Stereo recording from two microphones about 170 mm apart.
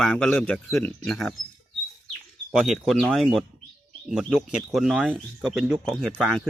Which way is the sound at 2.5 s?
Centre (ahead or behind).